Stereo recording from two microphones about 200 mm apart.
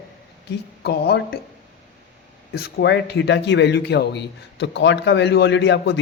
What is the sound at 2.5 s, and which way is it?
Speech, 55° left (ahead or behind).